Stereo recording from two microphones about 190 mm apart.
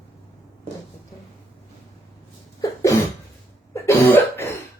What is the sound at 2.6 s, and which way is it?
Cough, 15° left (ahead or behind).